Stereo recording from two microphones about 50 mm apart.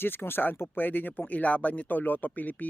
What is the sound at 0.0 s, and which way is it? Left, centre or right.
Speech, left.